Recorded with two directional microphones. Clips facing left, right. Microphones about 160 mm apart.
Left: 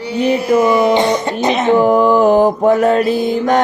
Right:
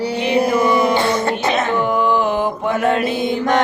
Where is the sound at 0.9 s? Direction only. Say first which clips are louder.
Left 3 dB; 15° left (ahead or behind).